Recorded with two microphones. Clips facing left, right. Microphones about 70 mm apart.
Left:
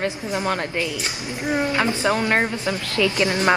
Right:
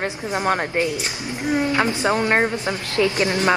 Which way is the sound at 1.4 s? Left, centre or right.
Left.